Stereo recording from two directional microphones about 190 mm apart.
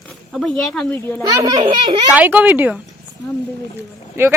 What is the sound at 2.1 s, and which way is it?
Speech, 10° right (ahead or behind).